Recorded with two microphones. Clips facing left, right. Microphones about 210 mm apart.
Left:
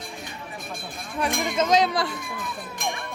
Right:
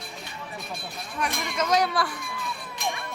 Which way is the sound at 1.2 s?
30° left (ahead or behind).